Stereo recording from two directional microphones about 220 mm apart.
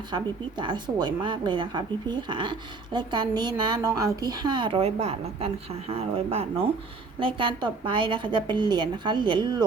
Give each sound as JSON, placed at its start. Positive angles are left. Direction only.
{"t": 0.1, "sound": "a woman's voice", "side_deg": -20}